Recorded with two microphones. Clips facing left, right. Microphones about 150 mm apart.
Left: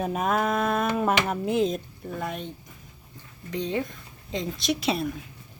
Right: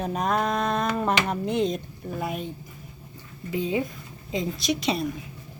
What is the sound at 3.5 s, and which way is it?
Speech, 5° right (ahead or behind).